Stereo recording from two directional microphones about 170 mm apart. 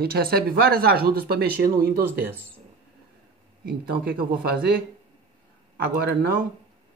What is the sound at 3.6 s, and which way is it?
Speech, 60° right (ahead or behind).